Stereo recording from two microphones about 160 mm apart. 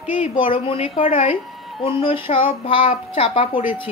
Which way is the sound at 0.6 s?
35° left (ahead or behind).